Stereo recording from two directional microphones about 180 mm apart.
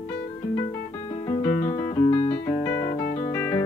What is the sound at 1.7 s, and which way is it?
Music, 20° left (ahead or behind).